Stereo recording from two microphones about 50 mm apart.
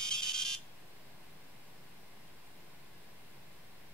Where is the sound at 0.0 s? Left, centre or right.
Centre.